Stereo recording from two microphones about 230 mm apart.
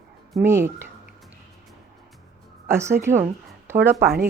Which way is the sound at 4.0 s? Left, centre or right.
Right.